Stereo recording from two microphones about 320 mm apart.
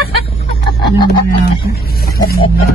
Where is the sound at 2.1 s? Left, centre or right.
Left.